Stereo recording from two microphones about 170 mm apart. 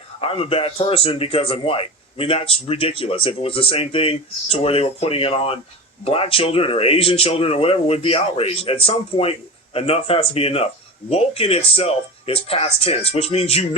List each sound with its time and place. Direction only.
0.2 s a man's voice: 35° left (ahead or behind)